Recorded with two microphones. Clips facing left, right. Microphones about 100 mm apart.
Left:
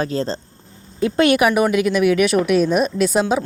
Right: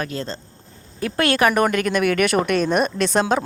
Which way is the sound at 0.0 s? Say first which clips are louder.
Left 6 dB; 30° left (ahead or behind).